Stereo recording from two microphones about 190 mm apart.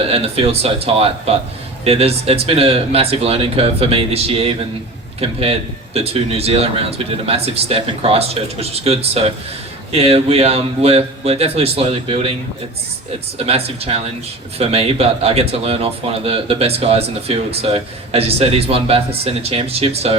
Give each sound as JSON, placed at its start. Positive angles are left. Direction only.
{"t": 0.0, "sound": "speech", "side_deg": -30}
{"t": 13.4, "sound": "speech", "side_deg": -35}